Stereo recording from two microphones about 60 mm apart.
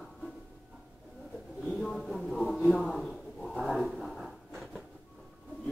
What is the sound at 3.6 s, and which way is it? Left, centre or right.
Dog, centre.